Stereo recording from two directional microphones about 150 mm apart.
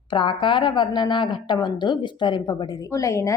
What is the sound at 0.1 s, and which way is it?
Speech, 30° left (ahead or behind).